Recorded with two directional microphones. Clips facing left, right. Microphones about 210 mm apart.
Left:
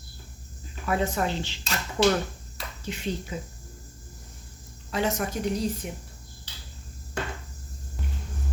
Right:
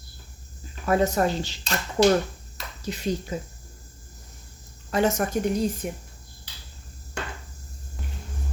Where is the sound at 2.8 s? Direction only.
40° right (ahead or behind).